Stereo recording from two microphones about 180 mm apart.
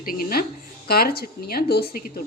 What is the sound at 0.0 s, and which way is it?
A woman's voice, 55° left (ahead or behind).